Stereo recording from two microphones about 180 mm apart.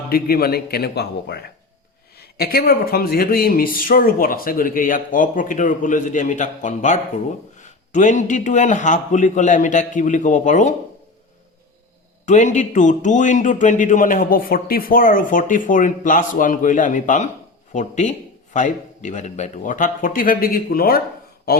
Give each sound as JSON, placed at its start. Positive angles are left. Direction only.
{"t": 0.1, "sound": "a man's voice", "side_deg": 60}
{"t": 12.2, "sound": "a man's voice", "side_deg": 40}